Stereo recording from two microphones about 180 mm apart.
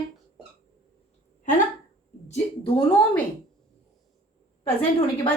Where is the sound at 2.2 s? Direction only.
35° left (ahead or behind).